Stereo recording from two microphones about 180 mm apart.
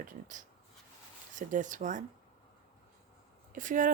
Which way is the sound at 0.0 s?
45° right (ahead or behind).